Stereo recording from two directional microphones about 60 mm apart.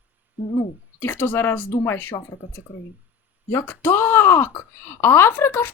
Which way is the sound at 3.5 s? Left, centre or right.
Left.